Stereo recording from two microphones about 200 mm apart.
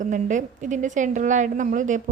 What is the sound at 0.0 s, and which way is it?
A woman's voice, 40° right (ahead or behind).